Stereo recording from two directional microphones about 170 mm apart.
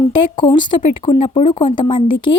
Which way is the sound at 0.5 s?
25° left (ahead or behind).